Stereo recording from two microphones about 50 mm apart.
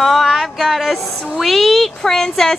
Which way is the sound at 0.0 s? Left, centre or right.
Centre.